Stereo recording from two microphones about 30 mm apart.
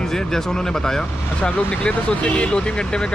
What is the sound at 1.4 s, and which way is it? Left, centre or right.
Speech, left.